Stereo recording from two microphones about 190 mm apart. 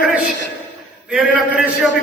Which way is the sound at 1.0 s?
5° right (ahead or behind).